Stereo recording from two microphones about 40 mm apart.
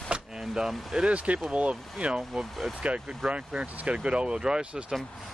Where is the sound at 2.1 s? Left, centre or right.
Centre.